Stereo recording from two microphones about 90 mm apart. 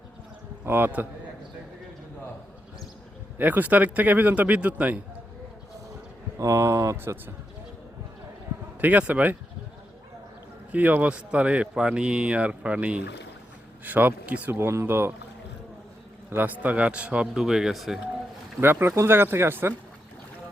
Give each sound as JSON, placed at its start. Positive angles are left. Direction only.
{"t": 0.6, "sound": "a man's voice", "side_deg": -20}
{"t": 3.3, "sound": "speech", "side_deg": -20}
{"t": 6.4, "sound": "speech", "side_deg": -35}
{"t": 6.9, "sound": "speech", "side_deg": -25}
{"t": 8.8, "sound": "speech", "side_deg": -15}
{"t": 10.7, "sound": "speech", "side_deg": -15}
{"t": 16.3, "sound": "speech", "side_deg": -20}
{"t": 18.6, "sound": "speech", "side_deg": -25}